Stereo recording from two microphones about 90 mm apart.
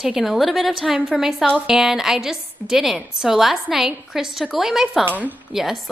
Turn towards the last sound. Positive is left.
turn(degrees=-5)  # may be behind; listen again after turning